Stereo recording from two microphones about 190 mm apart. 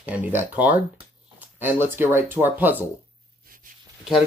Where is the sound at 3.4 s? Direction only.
50° right (ahead or behind).